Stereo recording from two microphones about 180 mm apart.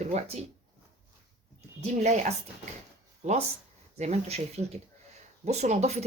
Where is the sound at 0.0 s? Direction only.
40° right (ahead or behind).